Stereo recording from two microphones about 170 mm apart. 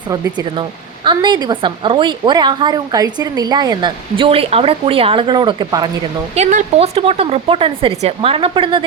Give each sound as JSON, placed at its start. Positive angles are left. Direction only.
{"t": 0.1, "sound": "a woman's voice", "side_deg": -25}
{"t": 6.3, "sound": "speech", "side_deg": -45}